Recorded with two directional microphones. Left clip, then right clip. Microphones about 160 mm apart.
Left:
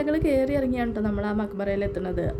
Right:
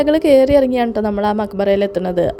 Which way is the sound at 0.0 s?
45° right (ahead or behind).